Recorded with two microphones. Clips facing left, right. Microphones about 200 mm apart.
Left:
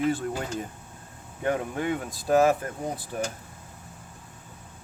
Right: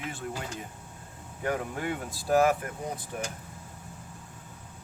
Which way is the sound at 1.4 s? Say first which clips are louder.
Left 4 dB; 25° left (ahead or behind).